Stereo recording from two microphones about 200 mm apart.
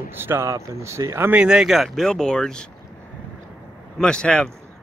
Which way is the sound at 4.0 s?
5° left (ahead or behind).